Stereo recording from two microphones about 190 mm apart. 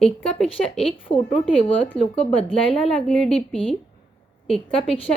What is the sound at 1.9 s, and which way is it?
Speech, 30° left (ahead or behind).